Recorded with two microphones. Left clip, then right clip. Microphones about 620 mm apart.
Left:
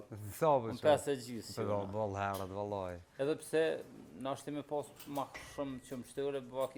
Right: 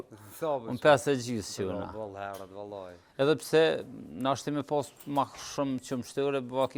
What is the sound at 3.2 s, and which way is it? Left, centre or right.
Speech, right.